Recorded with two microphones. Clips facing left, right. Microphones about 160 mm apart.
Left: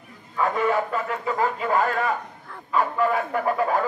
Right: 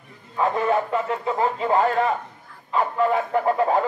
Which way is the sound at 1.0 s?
25° right (ahead or behind).